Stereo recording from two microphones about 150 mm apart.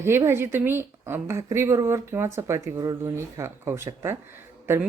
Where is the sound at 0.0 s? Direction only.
15° right (ahead or behind).